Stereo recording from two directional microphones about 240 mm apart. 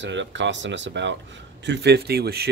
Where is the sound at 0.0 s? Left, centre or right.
Right.